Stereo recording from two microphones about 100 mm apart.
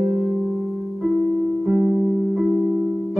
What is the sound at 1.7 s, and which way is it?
Music, 20° right (ahead or behind).